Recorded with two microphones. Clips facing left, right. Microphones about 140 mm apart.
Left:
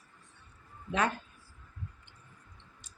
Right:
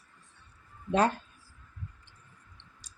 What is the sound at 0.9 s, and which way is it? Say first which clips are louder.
Speech: right 5 dB; 35° right (ahead or behind).